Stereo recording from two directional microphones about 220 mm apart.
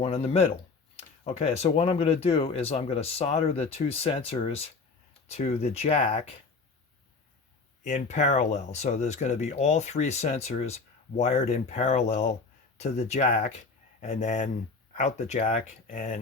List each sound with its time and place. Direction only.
0.0 s speech: 30° left (ahead or behind)
7.9 s speech: 30° left (ahead or behind)